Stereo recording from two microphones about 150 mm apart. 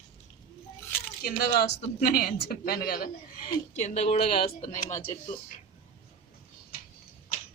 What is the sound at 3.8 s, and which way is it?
Speech, 45° left (ahead or behind).